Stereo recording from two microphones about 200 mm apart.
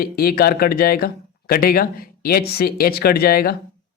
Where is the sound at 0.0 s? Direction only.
50° left (ahead or behind).